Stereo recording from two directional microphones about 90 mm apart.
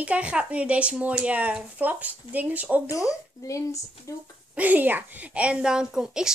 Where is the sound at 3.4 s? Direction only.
35° left (ahead or behind).